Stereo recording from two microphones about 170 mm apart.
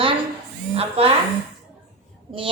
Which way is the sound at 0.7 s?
35° right (ahead or behind).